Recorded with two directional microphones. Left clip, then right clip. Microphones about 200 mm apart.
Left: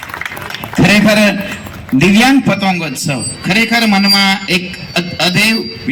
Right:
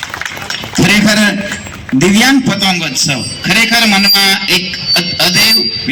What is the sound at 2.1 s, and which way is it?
A man's voice, 35° left (ahead or behind).